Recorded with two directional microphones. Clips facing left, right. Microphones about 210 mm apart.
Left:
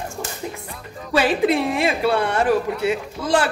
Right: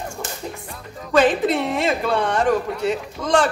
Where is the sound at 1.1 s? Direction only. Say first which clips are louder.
Right 1 dB; 10° left (ahead or behind).